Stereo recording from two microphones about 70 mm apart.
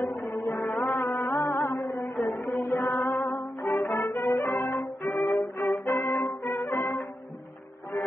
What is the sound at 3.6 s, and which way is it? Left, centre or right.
Music, left.